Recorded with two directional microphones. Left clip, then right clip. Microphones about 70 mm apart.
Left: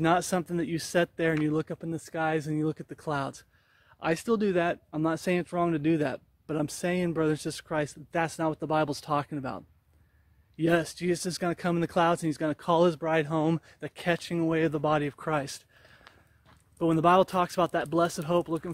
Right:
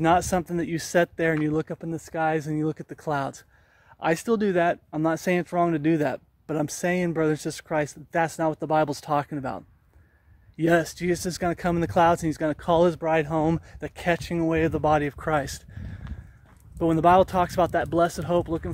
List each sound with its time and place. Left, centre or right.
0.0 s speech: right
4.0 s speech: right